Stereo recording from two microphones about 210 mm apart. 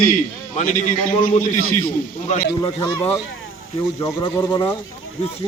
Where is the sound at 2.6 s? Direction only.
15° left (ahead or behind).